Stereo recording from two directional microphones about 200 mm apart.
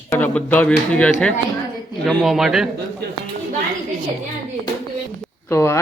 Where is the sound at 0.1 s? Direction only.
10° left (ahead or behind).